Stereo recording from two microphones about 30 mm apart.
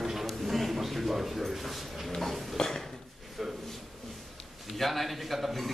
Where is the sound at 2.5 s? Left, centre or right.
Centre.